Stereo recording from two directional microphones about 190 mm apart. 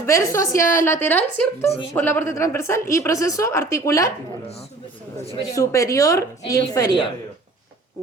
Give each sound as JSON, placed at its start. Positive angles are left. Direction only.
{"t": 0.0, "sound": "a woman's voice", "side_deg": 15}
{"t": 1.6, "sound": "a woman's voice", "side_deg": 30}
{"t": 1.9, "sound": "a woman's voice", "side_deg": 10}
{"t": 5.5, "sound": "a woman's voice", "side_deg": 15}